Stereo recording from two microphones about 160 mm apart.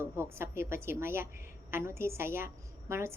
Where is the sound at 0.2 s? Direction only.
15° right (ahead or behind).